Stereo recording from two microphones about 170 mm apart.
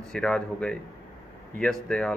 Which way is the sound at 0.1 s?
5° left (ahead or behind).